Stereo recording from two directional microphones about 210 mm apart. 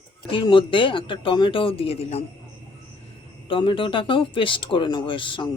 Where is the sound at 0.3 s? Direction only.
25° left (ahead or behind).